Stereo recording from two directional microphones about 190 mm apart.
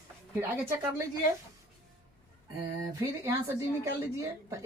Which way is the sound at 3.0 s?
15° right (ahead or behind).